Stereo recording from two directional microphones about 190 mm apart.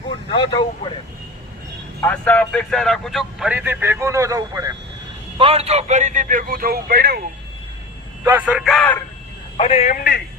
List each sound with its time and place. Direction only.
0.3 s speech: 25° left (ahead or behind)
2.0 s speech: 10° left (ahead or behind); by 4.7 s 15° right (ahead or behind)
5.4 s speech: 30° right (ahead or behind); by 7.2 s 55° right (ahead or behind)
8.2 s speech: 10° right (ahead or behind); by 9.0 s 10° left (ahead or behind)
9.6 s a man's voice: 30° left (ahead or behind)
9.9 s speech: 50° left (ahead or behind)